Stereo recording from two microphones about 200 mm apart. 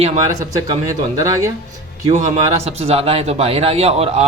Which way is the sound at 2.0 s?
35° right (ahead or behind).